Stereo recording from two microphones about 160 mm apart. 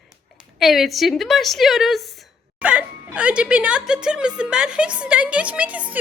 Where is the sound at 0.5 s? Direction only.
Centre (ahead or behind).